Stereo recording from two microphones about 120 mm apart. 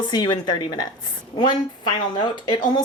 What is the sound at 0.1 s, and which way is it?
Speech, 35° left (ahead or behind).